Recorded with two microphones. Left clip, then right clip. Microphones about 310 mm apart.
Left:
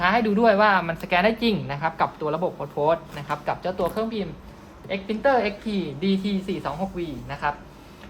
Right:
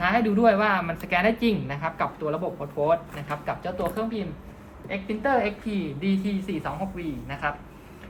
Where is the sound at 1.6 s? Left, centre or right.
Left.